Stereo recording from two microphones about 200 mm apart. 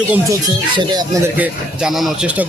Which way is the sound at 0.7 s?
20° right (ahead or behind).